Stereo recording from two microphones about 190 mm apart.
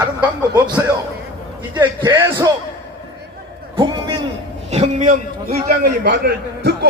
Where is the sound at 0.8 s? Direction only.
10° right (ahead or behind).